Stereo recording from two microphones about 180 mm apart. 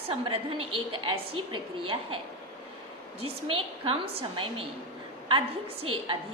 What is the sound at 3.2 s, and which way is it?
A woman's voice, 30° right (ahead or behind).